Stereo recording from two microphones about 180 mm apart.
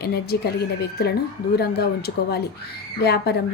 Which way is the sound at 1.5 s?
60° left (ahead or behind).